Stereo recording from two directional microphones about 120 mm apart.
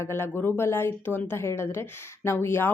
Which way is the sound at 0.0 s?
20° left (ahead or behind).